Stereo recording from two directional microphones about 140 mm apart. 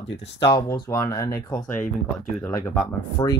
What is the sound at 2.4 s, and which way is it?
Speech, 25° left (ahead or behind).